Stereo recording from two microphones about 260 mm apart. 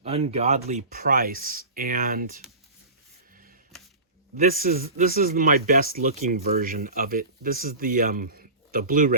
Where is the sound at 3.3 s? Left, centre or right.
Right.